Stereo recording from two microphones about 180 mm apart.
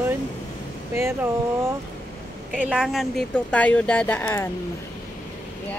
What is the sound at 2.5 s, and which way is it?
Speech, 5° right (ahead or behind).